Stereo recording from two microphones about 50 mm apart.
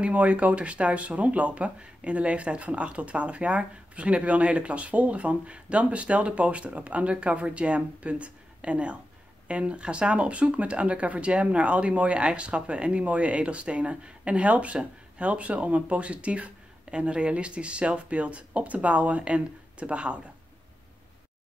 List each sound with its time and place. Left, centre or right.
0.0 s speech: right